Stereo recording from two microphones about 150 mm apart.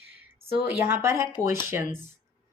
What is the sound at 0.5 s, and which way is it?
Speech, 15° right (ahead or behind).